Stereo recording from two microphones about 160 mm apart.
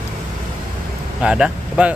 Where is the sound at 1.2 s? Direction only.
5° right (ahead or behind).